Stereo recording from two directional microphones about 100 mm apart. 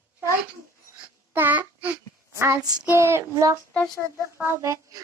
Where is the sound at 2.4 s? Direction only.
25° right (ahead or behind).